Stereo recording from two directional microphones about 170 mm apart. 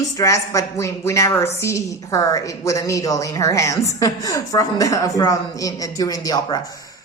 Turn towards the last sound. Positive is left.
turn(degrees=20)  # may be behind; listen again after turning